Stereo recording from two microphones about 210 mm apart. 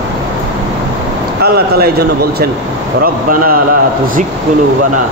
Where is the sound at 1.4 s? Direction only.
50° right (ahead or behind).